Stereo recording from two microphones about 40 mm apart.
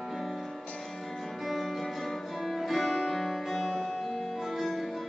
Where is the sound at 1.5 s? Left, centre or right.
Centre.